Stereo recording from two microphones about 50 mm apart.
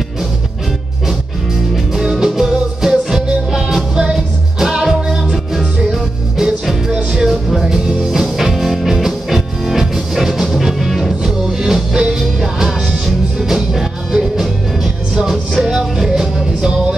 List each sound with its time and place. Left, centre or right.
2.0 s music: centre
6.9 s music: centre
7.2 s music: centre
7.6 s music: centre